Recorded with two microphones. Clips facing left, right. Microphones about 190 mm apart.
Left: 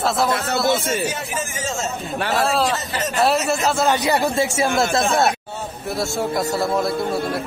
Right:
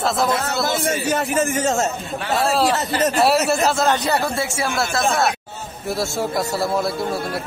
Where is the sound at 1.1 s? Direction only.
65° right (ahead or behind).